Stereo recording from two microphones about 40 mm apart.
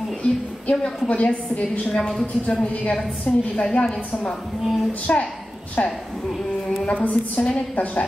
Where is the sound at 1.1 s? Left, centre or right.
Left.